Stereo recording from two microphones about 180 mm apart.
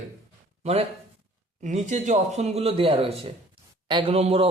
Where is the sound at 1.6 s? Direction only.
40° right (ahead or behind).